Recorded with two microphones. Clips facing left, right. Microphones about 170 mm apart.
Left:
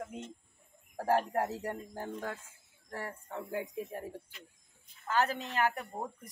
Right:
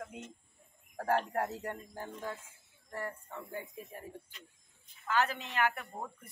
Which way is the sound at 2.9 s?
90° left.